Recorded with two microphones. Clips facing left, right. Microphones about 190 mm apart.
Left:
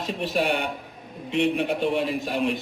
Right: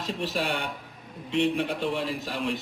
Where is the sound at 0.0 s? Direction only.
20° left (ahead or behind).